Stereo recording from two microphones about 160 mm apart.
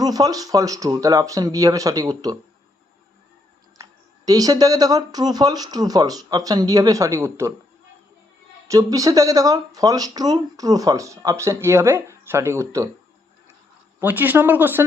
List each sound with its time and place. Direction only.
0.0 s speech: 25° right (ahead or behind)
4.3 s speech: 20° right (ahead or behind)
8.6 s speech: 20° right (ahead or behind)
14.0 s speech: 10° right (ahead or behind)